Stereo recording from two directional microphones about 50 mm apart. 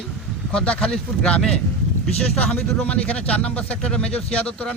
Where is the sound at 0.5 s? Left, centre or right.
Left.